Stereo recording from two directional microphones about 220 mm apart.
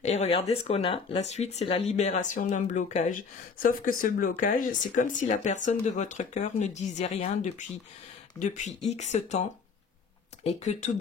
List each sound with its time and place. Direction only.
0.0 s speech: 30° left (ahead or behind)